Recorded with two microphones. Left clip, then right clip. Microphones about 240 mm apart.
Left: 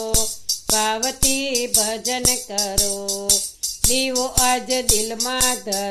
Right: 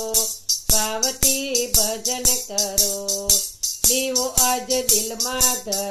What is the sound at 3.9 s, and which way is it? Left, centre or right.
Music, left.